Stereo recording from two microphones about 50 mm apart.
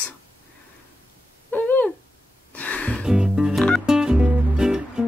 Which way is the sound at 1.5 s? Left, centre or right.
Left.